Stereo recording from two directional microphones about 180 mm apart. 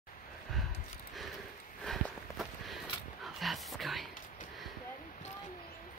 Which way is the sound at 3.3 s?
Centre (ahead or behind).